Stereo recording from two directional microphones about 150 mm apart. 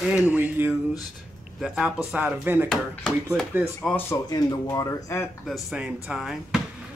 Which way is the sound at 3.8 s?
5° left (ahead or behind).